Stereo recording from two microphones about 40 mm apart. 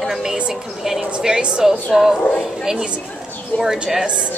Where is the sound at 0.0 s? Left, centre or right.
Centre.